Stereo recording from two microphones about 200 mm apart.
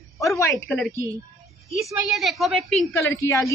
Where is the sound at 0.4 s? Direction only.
10° left (ahead or behind).